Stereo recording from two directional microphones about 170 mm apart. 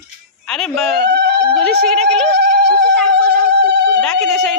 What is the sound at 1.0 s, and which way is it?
Speech, 80° right.